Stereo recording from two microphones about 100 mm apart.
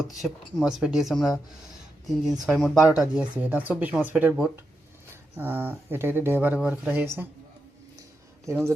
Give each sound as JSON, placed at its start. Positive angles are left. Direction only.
{"t": 0.2, "sound": "speech", "side_deg": -5}
{"t": 8.4, "sound": "speech", "side_deg": -30}